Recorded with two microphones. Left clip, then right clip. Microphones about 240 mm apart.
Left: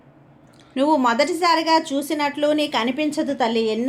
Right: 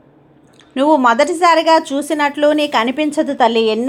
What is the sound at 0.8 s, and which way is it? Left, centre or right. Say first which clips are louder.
A woman's voice: right 6 dB; centre.